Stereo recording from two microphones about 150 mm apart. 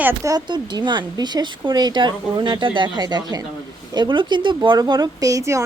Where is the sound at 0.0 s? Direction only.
20° right (ahead or behind).